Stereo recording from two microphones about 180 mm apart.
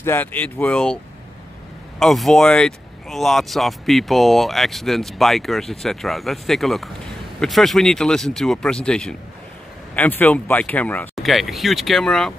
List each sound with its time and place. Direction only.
0.0 s speech: 10° left (ahead or behind)
2.0 s speech: centre (ahead or behind)